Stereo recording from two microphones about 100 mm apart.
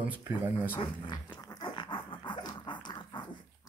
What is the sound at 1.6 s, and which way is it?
Dog, 55° left (ahead or behind).